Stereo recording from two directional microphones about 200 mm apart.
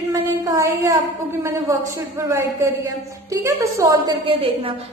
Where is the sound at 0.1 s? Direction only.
15° right (ahead or behind).